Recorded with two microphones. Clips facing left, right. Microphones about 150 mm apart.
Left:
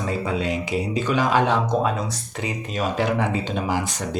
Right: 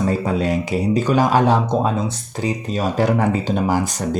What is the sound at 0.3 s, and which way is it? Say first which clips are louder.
Speech: right 4 dB; 45° right (ahead or behind).